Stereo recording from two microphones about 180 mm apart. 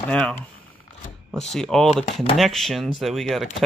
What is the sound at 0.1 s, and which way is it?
Speech, 5° left (ahead or behind).